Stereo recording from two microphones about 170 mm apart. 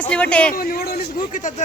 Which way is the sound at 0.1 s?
5° left (ahead or behind).